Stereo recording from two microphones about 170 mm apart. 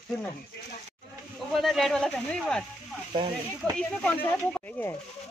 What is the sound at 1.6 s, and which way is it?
Speech, centre (ahead or behind).